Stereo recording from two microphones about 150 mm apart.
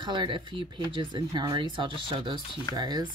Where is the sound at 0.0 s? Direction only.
30° right (ahead or behind).